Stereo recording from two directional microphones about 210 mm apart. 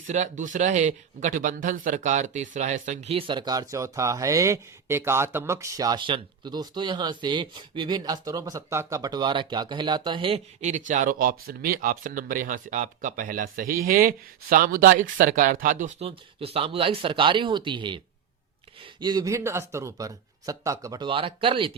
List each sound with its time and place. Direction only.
0.1 s speech: 35° right (ahead or behind)